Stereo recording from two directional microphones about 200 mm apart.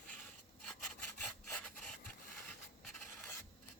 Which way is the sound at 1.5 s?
5° left (ahead or behind).